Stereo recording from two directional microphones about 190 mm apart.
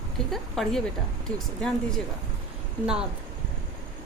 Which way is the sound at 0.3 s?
Centre (ahead or behind).